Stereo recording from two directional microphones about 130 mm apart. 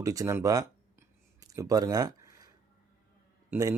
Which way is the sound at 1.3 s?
25° right (ahead or behind).